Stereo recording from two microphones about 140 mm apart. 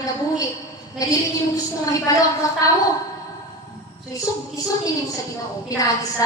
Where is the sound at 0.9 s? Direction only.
25° left (ahead or behind).